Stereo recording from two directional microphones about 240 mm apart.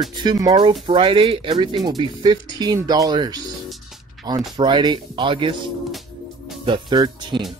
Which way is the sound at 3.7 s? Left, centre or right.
Centre.